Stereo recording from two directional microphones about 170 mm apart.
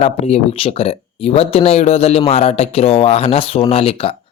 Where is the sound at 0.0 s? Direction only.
35° left (ahead or behind).